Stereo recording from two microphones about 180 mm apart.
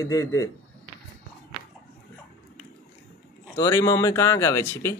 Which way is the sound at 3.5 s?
15° left (ahead or behind).